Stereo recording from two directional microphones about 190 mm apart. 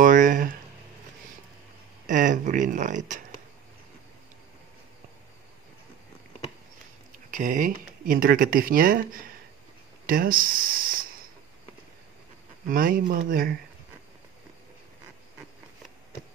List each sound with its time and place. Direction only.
0.0 s a sound: 45° right (ahead or behind)
2.0 s speech: 45° right (ahead or behind)
7.2 s speech: 45° right (ahead or behind)
10.0 s speech: 50° right (ahead or behind)
12.6 s speech: 45° right (ahead or behind)